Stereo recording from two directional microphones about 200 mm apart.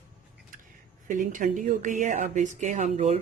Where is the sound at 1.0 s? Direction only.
40° right (ahead or behind).